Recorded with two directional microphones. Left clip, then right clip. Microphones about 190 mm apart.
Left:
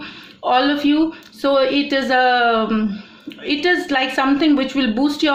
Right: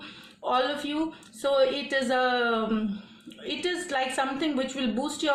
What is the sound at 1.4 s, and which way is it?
A woman's voice, 35° left (ahead or behind).